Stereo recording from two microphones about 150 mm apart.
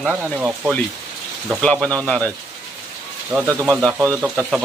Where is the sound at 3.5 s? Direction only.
15° right (ahead or behind).